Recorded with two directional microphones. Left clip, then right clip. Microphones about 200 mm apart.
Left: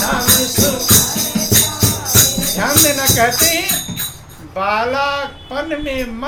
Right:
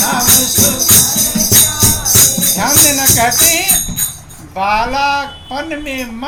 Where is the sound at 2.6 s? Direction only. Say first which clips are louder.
Right 1 dB; 15° left (ahead or behind).